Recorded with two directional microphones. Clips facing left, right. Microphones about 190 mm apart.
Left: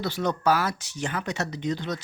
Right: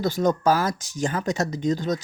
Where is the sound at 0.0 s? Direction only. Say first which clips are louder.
Right 4 dB; 45° right (ahead or behind).